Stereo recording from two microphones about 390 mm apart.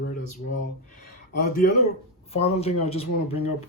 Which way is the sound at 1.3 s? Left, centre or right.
Left.